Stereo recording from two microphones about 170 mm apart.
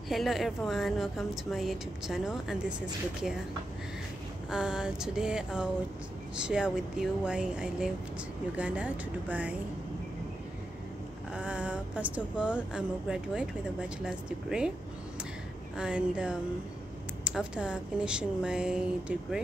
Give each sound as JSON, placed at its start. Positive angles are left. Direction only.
{"t": 0.1, "sound": "a woman's voice", "side_deg": 0}
{"t": 4.5, "sound": "a woman's voice", "side_deg": -5}
{"t": 11.3, "sound": "speech", "side_deg": -5}
{"t": 15.7, "sound": "a woman's voice", "side_deg": -5}